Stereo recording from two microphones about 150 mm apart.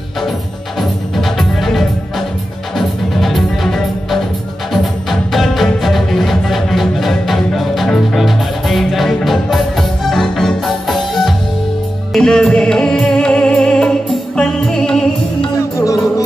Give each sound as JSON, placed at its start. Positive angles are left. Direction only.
{"t": 0.7, "sound": "music", "side_deg": 0}
{"t": 15.7, "sound": "music", "side_deg": 20}